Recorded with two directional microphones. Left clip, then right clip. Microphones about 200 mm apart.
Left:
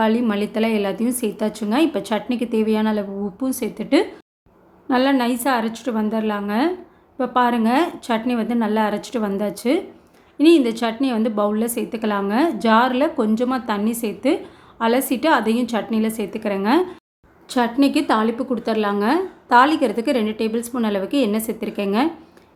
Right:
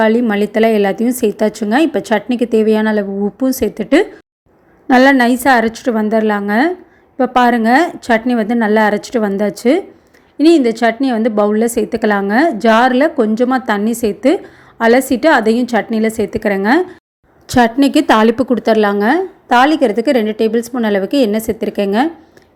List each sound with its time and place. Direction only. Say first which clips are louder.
0.0 s a woman's voice: right 7 dB; 25° right (ahead or behind)